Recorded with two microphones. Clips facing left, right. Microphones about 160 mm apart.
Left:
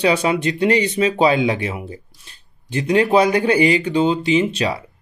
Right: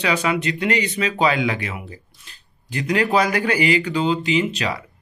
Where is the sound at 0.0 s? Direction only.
30° left (ahead or behind).